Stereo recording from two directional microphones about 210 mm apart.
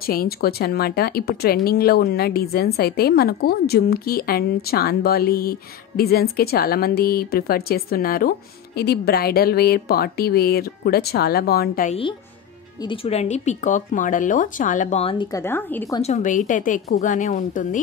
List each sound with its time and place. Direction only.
0.0 s speech: 45° left (ahead or behind)
12.8 s speech: 25° left (ahead or behind)
15.4 s speech: 10° left (ahead or behind)
16.0 s speech: 35° left (ahead or behind)